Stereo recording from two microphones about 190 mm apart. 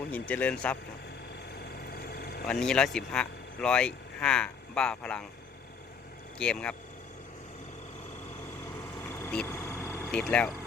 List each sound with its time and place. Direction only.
0.1 s speech: 10° left (ahead or behind)
1.9 s vehicle: 55° left (ahead or behind)
2.5 s speech: 5° left (ahead or behind)
6.4 s speech: 5° left (ahead or behind)
9.0 s vehicle: 10° left (ahead or behind)